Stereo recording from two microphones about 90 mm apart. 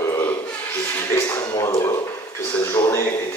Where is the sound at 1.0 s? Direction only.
25° left (ahead or behind).